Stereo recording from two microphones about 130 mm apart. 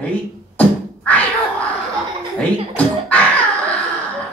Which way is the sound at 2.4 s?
10° left (ahead or behind).